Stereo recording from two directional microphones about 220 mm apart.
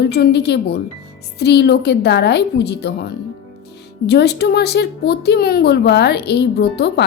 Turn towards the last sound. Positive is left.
turn(degrees=50)  # may be behind; listen again after turning